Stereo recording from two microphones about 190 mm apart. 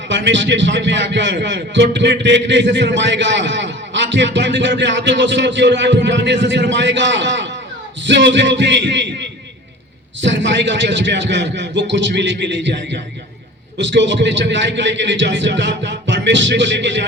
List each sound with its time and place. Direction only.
0.1 s a man's voice: 70° right (ahead or behind)